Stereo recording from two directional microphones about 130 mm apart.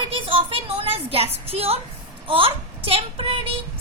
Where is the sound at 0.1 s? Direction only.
45° right (ahead or behind).